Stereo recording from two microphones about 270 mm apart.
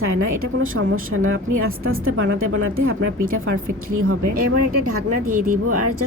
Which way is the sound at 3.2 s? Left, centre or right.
Right.